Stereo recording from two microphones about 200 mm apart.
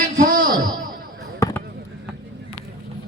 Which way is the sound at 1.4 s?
10° left (ahead or behind).